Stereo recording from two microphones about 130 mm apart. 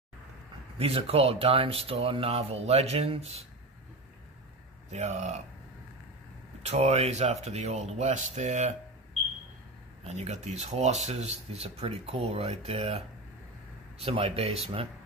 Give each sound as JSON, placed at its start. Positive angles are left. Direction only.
{"t": 0.7, "sound": "speech", "side_deg": -50}
{"t": 4.9, "sound": "speech", "side_deg": -60}
{"t": 6.6, "sound": "speech", "side_deg": -55}
{"t": 10.1, "sound": "speech", "side_deg": -60}